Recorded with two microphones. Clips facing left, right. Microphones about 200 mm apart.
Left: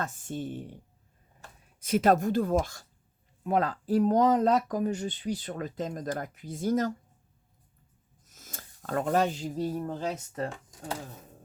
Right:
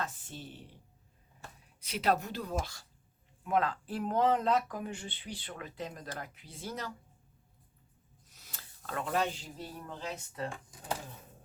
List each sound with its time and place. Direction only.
0.0 s speech: 45° left (ahead or behind)
1.8 s speech: 45° left (ahead or behind)
8.2 s speech: 45° left (ahead or behind)